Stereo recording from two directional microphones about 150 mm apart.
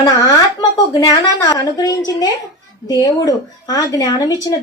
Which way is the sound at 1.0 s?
25° left (ahead or behind).